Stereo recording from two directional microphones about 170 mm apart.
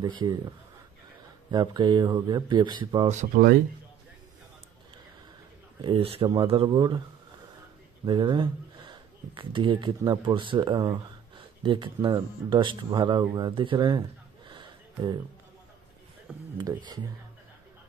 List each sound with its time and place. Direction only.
0.0 s speech: 25° right (ahead or behind)
1.5 s speech: 25° right (ahead or behind)
3.1 s speech: 45° right (ahead or behind)
5.8 s speech: 30° right (ahead or behind)
8.0 s speech: 30° right (ahead or behind)
14.5 s a sound: 25° right (ahead or behind)
16.5 s speech: 20° right (ahead or behind)